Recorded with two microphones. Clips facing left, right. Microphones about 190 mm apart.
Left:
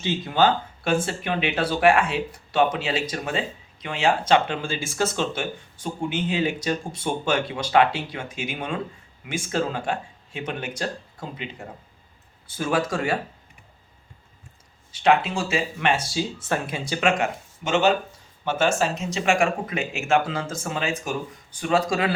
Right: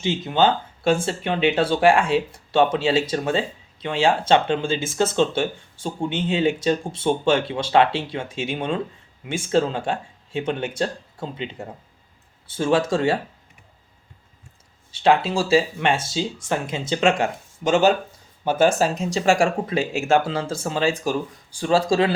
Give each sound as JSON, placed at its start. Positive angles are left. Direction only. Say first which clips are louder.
{"t": 0.0, "sound": "speech", "louder": "right 2 dB", "side_deg": -20}
{"t": 12.5, "sound": "speech", "louder": "right 4 dB", "side_deg": -30}
{"t": 14.9, "sound": "speech", "louder": "right 2 dB", "side_deg": -30}
{"t": 16.1, "sound": "speech", "louder": "right 1 dB", "side_deg": -15}